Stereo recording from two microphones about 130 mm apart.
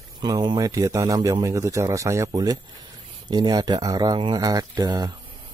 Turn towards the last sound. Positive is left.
turn(degrees=-30)  # may be behind; listen again after turning